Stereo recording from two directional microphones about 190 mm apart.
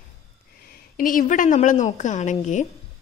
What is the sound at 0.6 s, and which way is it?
A woman's voice, 50° left (ahead or behind).